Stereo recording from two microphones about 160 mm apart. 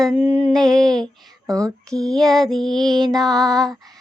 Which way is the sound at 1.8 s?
5° left (ahead or behind).